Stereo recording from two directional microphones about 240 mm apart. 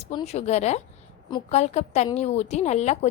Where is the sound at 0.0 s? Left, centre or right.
Left.